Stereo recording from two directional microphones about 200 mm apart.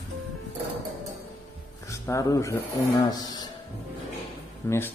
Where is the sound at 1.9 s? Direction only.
15° left (ahead or behind).